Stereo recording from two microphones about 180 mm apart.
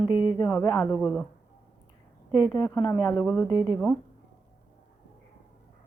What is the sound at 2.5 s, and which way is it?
Speech, 25° left (ahead or behind).